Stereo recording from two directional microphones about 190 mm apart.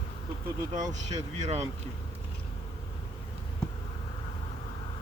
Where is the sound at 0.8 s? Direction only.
40° right (ahead or behind).